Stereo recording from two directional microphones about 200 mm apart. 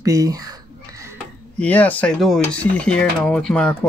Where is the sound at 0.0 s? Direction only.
15° right (ahead or behind).